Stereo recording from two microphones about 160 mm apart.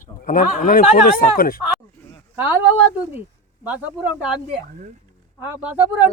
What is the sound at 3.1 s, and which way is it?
Speech, 10° right (ahead or behind).